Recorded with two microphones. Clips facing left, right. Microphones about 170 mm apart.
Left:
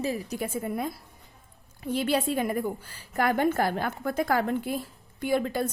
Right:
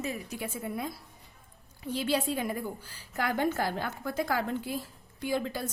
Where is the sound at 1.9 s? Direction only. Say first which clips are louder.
Left 4 dB; 55° left (ahead or behind).